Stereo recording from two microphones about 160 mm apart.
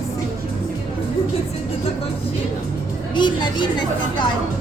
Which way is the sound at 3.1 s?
30° left (ahead or behind).